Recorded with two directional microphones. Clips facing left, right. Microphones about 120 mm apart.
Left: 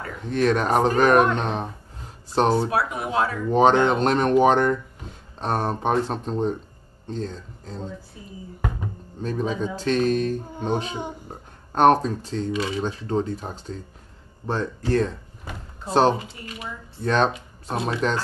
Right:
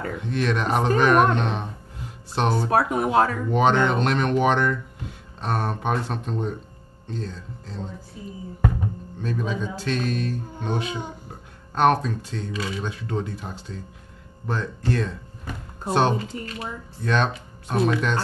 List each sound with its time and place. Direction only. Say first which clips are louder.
0.2 s speech: left 5 dB; 40° left (ahead or behind)
2.7 s speech: right 4 dB; 45° right (ahead or behind)
3.5 s speech: left 3 dB; 40° left (ahead or behind)
9.2 s speech: left 2 dB; 40° left (ahead or behind)
12.5 s speech: left 2 dB; 20° left (ahead or behind)
12.8 s speech: left 4 dB; 35° left (ahead or behind)
16.2 s speech: right 5 dB; 10° left (ahead or behind)
17.0 s speech: left 3 dB; 35° left (ahead or behind)